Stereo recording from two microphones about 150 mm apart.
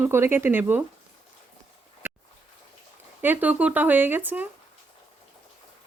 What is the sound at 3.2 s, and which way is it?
Speech, 10° right (ahead or behind).